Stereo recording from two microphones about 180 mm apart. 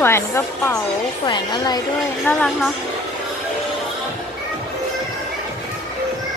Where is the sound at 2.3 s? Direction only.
10° left (ahead or behind).